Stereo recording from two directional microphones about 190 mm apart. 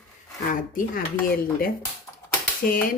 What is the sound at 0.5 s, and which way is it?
Speech, 45° left (ahead or behind).